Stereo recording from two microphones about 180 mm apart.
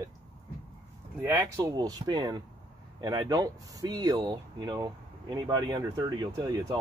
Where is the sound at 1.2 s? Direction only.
15° right (ahead or behind).